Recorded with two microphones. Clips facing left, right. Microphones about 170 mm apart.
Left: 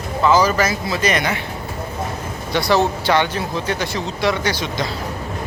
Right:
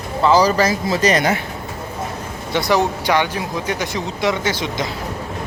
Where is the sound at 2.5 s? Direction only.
20° right (ahead or behind).